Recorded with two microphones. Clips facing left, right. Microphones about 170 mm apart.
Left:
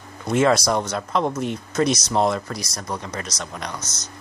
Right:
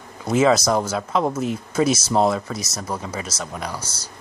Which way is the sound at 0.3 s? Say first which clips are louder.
Right 1 dB; 5° right (ahead or behind).